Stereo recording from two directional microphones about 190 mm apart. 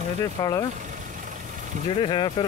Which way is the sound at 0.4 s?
20° left (ahead or behind).